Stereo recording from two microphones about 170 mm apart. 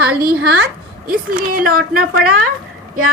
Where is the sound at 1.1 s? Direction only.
55° right (ahead or behind).